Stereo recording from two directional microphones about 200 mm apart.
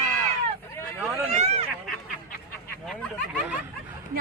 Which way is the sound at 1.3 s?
30° right (ahead or behind).